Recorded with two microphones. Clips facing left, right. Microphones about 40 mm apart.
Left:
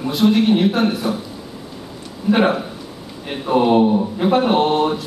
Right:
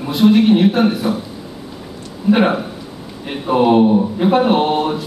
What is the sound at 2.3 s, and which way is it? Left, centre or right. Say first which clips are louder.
A man's voice: right 2 dB; centre.